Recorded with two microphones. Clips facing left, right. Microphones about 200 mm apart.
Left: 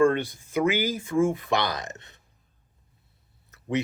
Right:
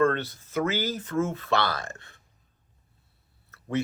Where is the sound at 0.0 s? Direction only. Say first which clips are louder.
Left 3 dB; 15° left (ahead or behind).